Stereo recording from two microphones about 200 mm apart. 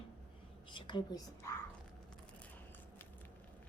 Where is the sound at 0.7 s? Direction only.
20° left (ahead or behind).